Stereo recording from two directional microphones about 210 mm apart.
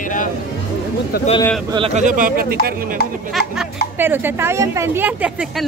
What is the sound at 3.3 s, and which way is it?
Speech, 5° right (ahead or behind).